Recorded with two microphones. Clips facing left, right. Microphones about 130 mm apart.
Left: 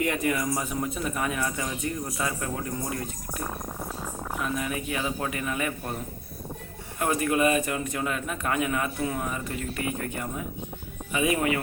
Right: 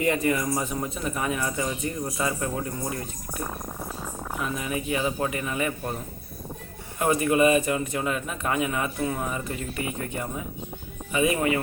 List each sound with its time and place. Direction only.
0.0 s a man's voice: centre (ahead or behind)
7.0 s a man's voice: 5° right (ahead or behind)